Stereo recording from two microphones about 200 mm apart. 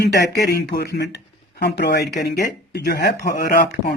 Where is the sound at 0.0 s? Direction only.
55° left (ahead or behind).